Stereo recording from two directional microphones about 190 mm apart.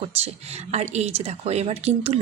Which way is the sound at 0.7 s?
35° right (ahead or behind).